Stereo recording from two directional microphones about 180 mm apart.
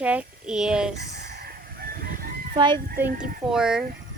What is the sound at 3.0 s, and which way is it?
Speech, 10° right (ahead or behind).